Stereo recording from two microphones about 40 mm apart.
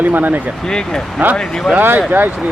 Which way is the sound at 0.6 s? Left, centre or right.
Centre.